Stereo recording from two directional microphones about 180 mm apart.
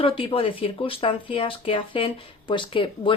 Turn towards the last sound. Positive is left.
turn(degrees=30)  # may be behind; listen again after turning